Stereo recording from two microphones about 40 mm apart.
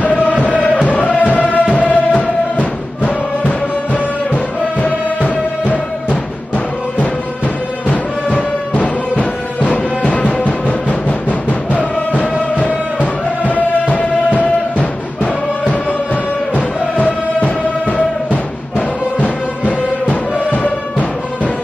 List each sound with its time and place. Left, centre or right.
0.0 s music: left
6.0 s music: left
10.4 s music: left
16.5 s music: left